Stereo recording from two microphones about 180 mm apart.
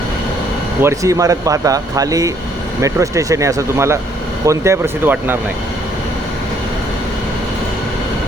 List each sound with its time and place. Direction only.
0.8 s speech: 15° right (ahead or behind)